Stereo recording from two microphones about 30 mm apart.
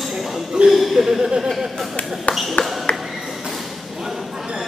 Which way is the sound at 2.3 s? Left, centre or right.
Left.